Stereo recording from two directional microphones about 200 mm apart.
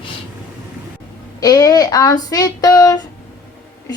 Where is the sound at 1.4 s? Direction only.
20° left (ahead or behind).